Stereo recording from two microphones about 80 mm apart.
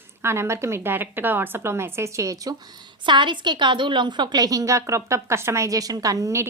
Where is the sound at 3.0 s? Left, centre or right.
Right.